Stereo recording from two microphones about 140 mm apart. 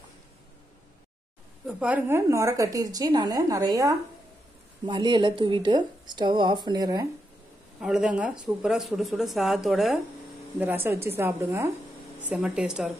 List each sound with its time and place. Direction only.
1.7 s a woman's voice: 10° right (ahead or behind); by 7.1 s 25° right (ahead or behind)
7.8 s speech: 5° right (ahead or behind)
10.6 s a woman's voice: 15° right (ahead or behind)
12.2 s a woman's voice: 10° right (ahead or behind)